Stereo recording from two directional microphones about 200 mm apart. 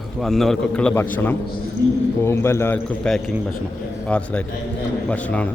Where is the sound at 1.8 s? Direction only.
50° left (ahead or behind).